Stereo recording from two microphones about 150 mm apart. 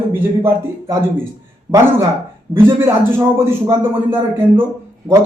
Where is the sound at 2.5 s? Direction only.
15° right (ahead or behind).